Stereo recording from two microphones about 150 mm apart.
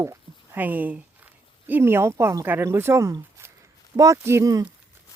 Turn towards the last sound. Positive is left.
turn(degrees=-20)  # may be behind; listen again after turning